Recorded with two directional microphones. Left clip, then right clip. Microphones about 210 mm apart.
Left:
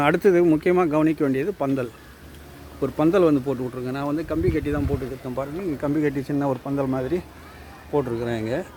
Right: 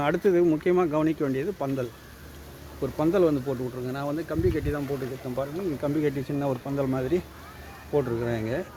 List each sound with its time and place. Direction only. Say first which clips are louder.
0.0 s speech: left 5 dB; 35° left (ahead or behind); by 7.2 s 10° left (ahead or behind)
7.9 s speech: left 2 dB; 20° left (ahead or behind)